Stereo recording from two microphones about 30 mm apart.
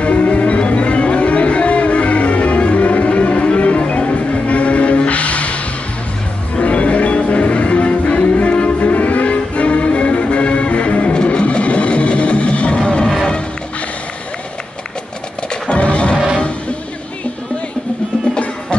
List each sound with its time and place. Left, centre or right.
0.0 s music: left
15.7 s music: left